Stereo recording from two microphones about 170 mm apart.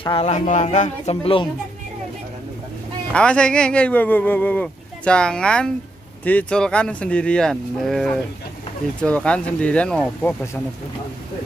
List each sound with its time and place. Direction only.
0.0 s speech: 35° left (ahead or behind)
3.1 s speech: 5° left (ahead or behind)